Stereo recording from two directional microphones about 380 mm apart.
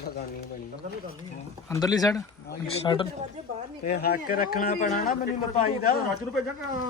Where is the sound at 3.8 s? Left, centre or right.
Left.